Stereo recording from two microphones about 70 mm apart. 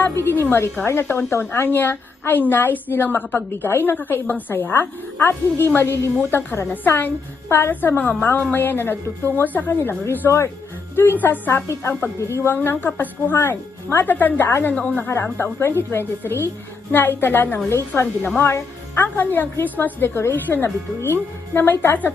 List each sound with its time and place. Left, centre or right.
0.2 s a woman's voice: left
10.1 s a woman's voice: left
14.7 s a woman's voice: centre
15.0 s a woman's voice: left
19.0 s a woman's voice: left
20.1 s a woman's voice: left